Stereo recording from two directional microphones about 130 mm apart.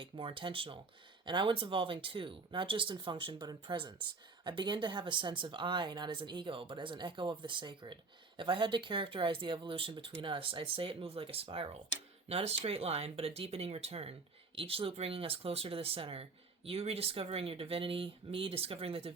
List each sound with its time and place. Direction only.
0.0 s speech: 40° right (ahead or behind)